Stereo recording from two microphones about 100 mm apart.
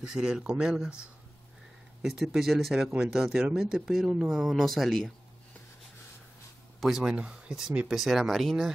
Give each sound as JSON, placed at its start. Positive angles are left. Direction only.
{"t": 0.0, "sound": "speech", "side_deg": -10}
{"t": 2.0, "sound": "speech", "side_deg": -5}
{"t": 6.8, "sound": "speech", "side_deg": -5}